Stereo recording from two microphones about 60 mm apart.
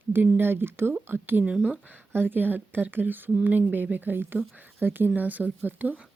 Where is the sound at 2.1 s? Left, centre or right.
Right.